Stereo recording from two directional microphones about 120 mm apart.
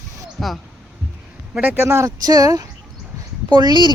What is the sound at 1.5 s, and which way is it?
Speech, 15° right (ahead or behind).